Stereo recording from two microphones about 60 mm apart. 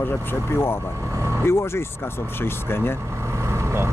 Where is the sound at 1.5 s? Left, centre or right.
Left.